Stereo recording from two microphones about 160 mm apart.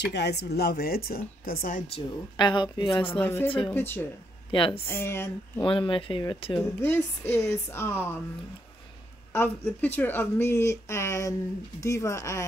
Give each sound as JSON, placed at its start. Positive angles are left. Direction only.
{"t": 0.0, "sound": "a woman's voice", "side_deg": 90}
{"t": 2.0, "sound": "speech", "side_deg": 30}
{"t": 3.1, "sound": "speech", "side_deg": 15}
{"t": 3.4, "sound": "speech", "side_deg": 35}
{"t": 3.7, "sound": "speech", "side_deg": 15}
{"t": 4.5, "sound": "speech", "side_deg": 35}
{"t": 4.8, "sound": "speech", "side_deg": 15}
{"t": 5.6, "sound": "speech", "side_deg": 30}
{"t": 6.6, "sound": "speech", "side_deg": 15}
{"t": 9.3, "sound": "speech", "side_deg": 10}